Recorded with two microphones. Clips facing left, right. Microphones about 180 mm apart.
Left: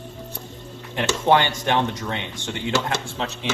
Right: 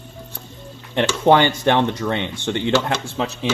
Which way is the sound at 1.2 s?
60° right (ahead or behind).